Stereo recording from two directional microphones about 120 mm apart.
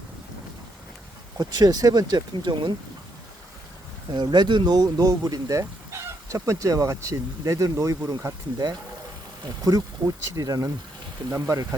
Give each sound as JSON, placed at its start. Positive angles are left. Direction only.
{"t": 1.4, "sound": "speech", "side_deg": -30}
{"t": 4.1, "sound": "speech", "side_deg": -35}
{"t": 10.0, "sound": "speech", "side_deg": -35}